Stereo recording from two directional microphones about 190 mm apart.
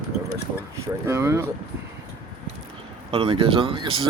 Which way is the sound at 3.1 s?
30° right (ahead or behind).